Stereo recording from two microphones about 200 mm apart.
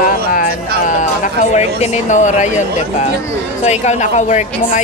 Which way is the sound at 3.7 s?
35° left (ahead or behind).